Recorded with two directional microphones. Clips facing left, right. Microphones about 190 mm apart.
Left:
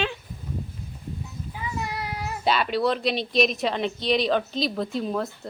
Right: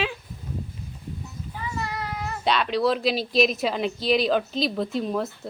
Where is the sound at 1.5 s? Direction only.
10° left (ahead or behind).